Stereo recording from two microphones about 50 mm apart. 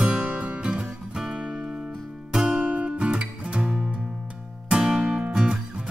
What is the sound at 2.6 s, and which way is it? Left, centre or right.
Music, right.